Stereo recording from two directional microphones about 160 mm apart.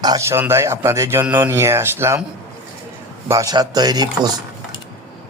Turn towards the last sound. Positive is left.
turn(degrees=-25)  # may be behind; listen again after turning